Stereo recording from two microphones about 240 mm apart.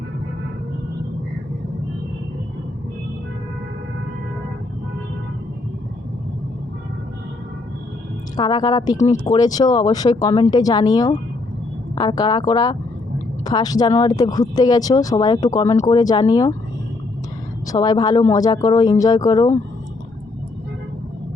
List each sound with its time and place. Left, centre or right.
8.4 s speech: centre
17.7 s speech: centre